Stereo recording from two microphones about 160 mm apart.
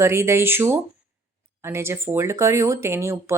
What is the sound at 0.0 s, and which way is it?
Speech, 15° right (ahead or behind).